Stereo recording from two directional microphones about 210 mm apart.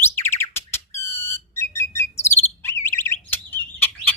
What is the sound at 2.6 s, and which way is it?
Bird, 10° left (ahead or behind).